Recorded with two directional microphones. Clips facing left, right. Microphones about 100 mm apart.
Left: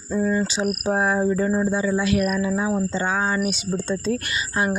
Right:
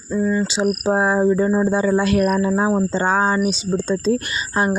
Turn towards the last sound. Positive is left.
turn(degrees=-30)  # may be behind; listen again after turning